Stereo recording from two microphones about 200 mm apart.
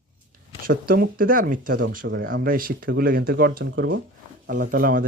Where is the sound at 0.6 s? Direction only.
45° right (ahead or behind).